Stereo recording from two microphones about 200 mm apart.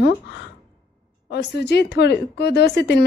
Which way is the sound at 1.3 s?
60° left (ahead or behind).